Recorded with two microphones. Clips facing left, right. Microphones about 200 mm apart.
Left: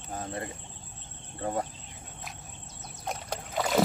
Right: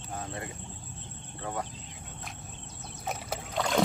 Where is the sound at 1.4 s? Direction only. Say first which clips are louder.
Left 4 dB; 40° left (ahead or behind).